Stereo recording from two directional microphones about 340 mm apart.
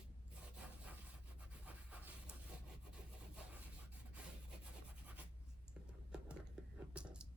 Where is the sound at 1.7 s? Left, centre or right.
Centre.